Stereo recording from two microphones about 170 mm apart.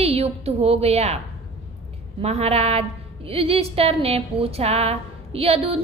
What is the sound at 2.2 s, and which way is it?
A woman's voice, 35° right (ahead or behind).